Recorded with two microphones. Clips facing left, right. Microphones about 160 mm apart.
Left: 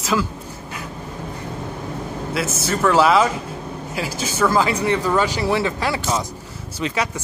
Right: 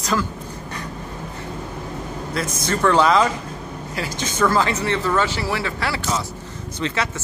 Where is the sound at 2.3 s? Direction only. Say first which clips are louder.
Left 1 dB; 5° left (ahead or behind).